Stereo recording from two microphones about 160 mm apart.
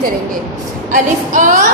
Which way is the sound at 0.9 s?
55° right (ahead or behind).